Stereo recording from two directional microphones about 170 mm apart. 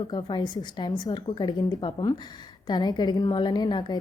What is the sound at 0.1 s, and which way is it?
A woman's voice, 25° left (ahead or behind).